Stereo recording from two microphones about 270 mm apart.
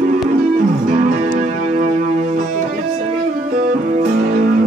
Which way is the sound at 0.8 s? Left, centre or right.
Right.